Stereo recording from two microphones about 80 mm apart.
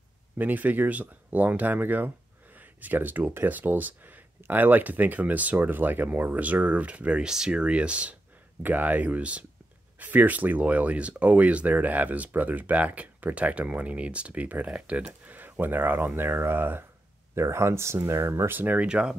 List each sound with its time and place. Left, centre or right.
0.4 s speech: right